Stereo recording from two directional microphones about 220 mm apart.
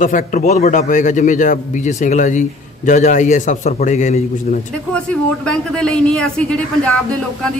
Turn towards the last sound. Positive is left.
turn(degrees=5)  # may be behind; listen again after turning